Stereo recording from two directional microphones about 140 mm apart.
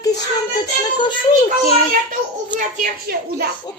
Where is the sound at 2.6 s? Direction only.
75° right (ahead or behind).